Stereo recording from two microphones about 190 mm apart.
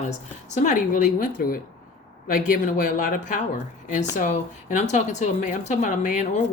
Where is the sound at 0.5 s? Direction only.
40° left (ahead or behind).